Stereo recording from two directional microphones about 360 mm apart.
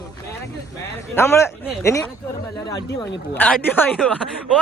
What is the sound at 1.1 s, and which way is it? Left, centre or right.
Speech, centre.